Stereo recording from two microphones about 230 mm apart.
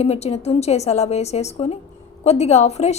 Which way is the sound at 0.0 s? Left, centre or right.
Left.